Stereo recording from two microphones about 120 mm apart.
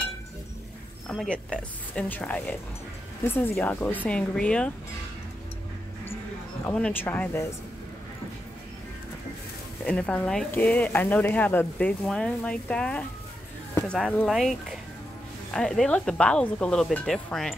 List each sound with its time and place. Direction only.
1.0 s speech: 5° left (ahead or behind)
6.6 s speech: 10° left (ahead or behind)
9.8 s speech: 10° left (ahead or behind)
14.2 s speech: centre (ahead or behind)